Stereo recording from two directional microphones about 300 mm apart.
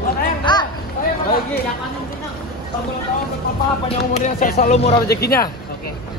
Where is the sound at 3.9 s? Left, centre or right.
Left.